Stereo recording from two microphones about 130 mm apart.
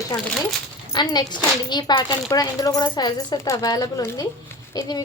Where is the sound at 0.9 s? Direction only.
35° left (ahead or behind).